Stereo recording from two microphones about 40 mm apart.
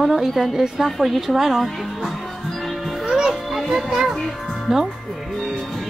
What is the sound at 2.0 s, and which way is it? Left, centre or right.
Music, centre.